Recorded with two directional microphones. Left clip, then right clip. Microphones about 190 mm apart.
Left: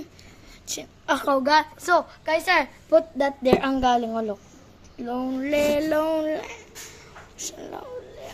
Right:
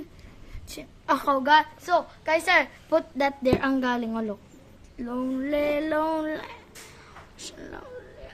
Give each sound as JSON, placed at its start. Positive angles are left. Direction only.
{"t": 0.7, "sound": "a woman's voice", "side_deg": -20}
{"t": 1.3, "sound": "a woman's voice", "side_deg": 10}
{"t": 1.8, "sound": "a woman's voice", "side_deg": 30}
{"t": 2.2, "sound": "a woman's voice", "side_deg": -10}
{"t": 7.3, "sound": "a sound", "side_deg": -20}